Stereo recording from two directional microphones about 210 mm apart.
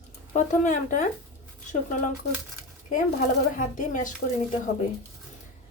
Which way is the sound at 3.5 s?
40° left (ahead or behind).